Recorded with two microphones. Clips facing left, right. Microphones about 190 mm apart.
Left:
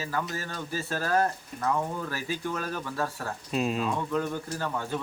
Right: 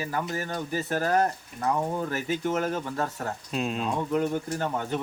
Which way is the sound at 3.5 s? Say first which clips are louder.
Left 2 dB; centre (ahead or behind).